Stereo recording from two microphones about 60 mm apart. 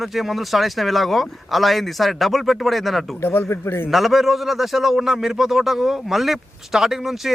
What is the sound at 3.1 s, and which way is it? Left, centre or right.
Speech, left.